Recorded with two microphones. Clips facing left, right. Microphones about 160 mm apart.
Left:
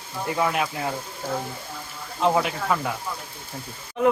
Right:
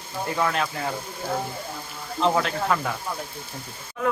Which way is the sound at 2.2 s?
10° left (ahead or behind).